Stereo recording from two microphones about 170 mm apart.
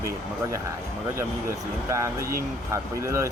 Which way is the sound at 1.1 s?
15° right (ahead or behind).